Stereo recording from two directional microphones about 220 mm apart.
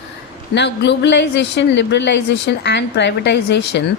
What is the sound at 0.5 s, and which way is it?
A woman's voice, 50° left (ahead or behind).